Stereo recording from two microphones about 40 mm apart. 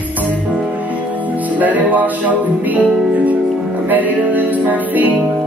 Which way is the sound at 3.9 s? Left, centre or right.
Right.